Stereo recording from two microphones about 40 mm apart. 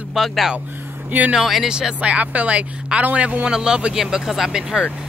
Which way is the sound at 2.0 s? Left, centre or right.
Right.